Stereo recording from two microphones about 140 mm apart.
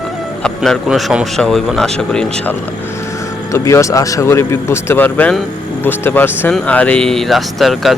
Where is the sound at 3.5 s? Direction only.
20° left (ahead or behind).